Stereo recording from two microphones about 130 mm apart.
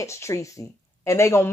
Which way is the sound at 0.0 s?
20° left (ahead or behind).